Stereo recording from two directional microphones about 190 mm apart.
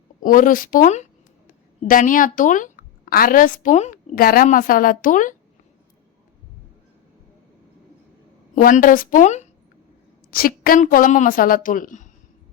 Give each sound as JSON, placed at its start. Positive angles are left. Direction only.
{"t": 0.2, "sound": "a woman's voice", "side_deg": 45}
{"t": 8.5, "sound": "a woman's voice", "side_deg": 45}
{"t": 10.3, "sound": "a woman's voice", "side_deg": 50}